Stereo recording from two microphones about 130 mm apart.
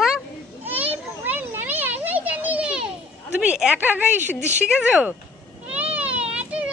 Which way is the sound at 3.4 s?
10° right (ahead or behind).